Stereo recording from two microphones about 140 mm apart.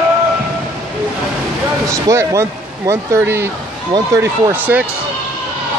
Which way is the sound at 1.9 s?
20° right (ahead or behind).